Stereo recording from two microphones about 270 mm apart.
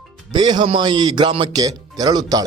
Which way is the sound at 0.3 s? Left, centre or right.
Centre.